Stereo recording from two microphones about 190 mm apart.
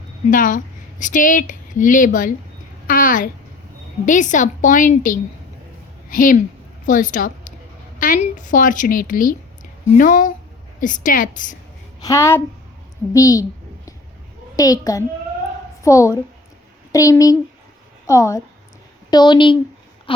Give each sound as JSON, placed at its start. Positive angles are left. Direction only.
{"t": 0.3, "sound": "a woman's voice", "side_deg": 45}
{"t": 11.9, "sound": "a woman's voice", "side_deg": 15}
{"t": 14.5, "sound": "a child's voice", "side_deg": 20}
{"t": 20.1, "sound": "a sound", "side_deg": 30}